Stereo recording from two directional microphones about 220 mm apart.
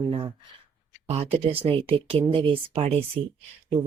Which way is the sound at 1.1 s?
25° right (ahead or behind).